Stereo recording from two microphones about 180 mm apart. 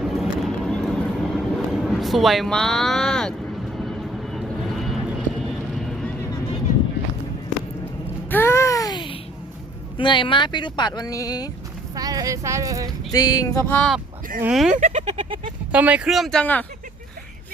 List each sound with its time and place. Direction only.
0.0 s vehicle: centre (ahead or behind)
8.3 s a sound: 15° left (ahead or behind)
10.0 s speech: 25° left (ahead or behind)
11.9 s speech: 20° right (ahead or behind)
13.1 s music: 20° left (ahead or behind)
14.4 s speech: 5° right (ahead or behind)
14.8 s speech: 40° right (ahead or behind)
15.0 s a sound: 30° right (ahead or behind)
15.7 s speech: 10° right (ahead or behind); by 16.6 s 10° left (ahead or behind)